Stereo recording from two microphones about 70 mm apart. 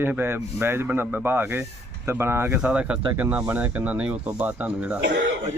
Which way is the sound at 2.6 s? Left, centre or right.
Centre.